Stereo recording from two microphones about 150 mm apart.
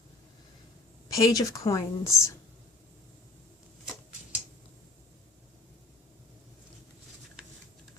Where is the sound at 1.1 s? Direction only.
25° left (ahead or behind).